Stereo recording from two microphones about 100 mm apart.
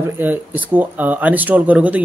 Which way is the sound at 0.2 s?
20° right (ahead or behind).